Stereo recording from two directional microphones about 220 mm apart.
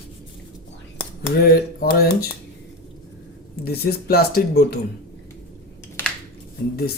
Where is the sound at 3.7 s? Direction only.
45° left (ahead or behind).